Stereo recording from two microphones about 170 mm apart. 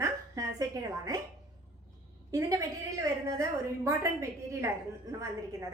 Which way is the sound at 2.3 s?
20° right (ahead or behind).